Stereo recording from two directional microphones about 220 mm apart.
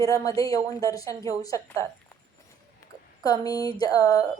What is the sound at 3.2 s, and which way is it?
Speech, 15° left (ahead or behind).